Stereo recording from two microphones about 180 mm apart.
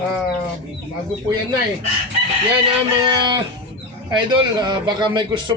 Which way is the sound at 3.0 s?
25° right (ahead or behind).